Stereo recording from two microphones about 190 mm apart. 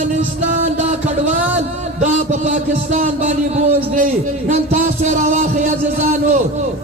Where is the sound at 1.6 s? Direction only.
35° right (ahead or behind).